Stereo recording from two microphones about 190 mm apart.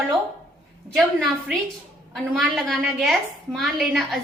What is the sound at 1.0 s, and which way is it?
A woman's voice, centre (ahead or behind).